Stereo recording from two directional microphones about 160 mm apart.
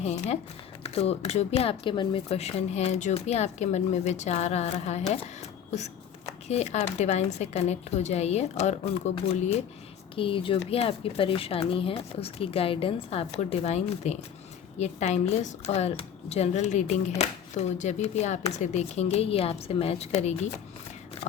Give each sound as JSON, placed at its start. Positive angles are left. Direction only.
{"t": 0.0, "sound": "speech", "side_deg": 40}